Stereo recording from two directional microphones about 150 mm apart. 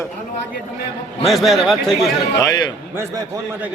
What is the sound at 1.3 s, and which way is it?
Speech, centre (ahead or behind).